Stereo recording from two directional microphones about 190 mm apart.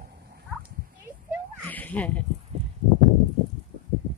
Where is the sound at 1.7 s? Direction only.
10° left (ahead or behind).